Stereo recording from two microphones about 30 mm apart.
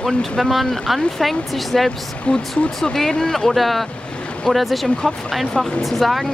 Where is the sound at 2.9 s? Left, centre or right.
Centre.